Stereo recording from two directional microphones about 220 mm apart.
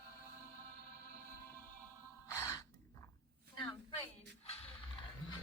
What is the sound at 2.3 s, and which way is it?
Gasp, 15° left (ahead or behind).